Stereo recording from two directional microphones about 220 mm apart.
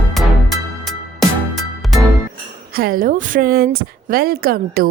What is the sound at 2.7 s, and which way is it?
A woman's voice, 45° right (ahead or behind).